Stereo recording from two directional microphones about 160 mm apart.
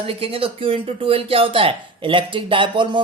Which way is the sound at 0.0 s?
35° right (ahead or behind).